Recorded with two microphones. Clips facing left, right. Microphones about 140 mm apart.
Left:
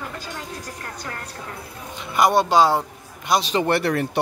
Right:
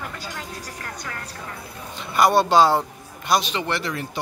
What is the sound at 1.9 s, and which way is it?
Speech, 20° left (ahead or behind).